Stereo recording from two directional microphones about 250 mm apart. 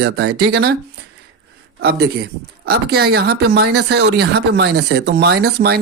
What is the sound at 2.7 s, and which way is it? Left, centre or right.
Speech, right.